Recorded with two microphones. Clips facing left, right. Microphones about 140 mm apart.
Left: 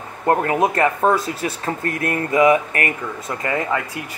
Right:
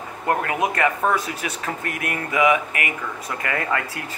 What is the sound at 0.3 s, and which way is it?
Speech, 35° left (ahead or behind).